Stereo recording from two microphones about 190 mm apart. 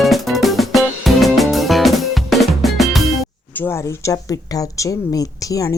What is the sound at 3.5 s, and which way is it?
Speech, 10° left (ahead or behind).